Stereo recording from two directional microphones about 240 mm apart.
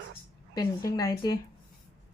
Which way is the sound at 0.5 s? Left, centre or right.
Centre.